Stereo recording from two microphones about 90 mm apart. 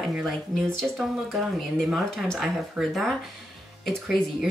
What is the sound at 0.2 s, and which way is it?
Speech, 5° left (ahead or behind).